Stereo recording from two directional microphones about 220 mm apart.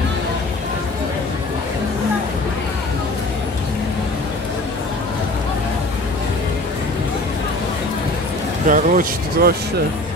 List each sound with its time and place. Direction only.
8.6 s speech: 40° right (ahead or behind)